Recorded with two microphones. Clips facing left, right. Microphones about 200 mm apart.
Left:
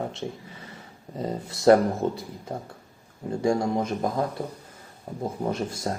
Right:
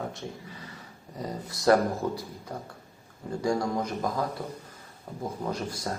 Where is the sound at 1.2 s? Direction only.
25° left (ahead or behind).